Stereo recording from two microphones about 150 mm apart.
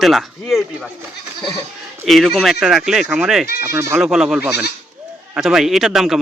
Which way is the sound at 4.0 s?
5° right (ahead or behind).